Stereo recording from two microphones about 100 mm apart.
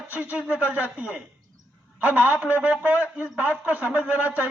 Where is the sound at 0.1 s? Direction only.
15° right (ahead or behind).